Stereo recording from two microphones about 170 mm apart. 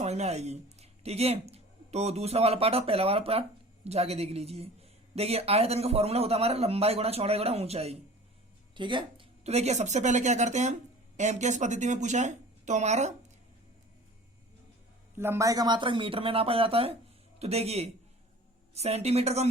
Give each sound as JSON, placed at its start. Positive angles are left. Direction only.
{"t": 0.0, "sound": "speech", "side_deg": -40}
{"t": 15.1, "sound": "speech", "side_deg": -15}